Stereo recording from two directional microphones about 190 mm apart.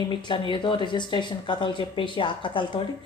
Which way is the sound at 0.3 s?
25° left (ahead or behind).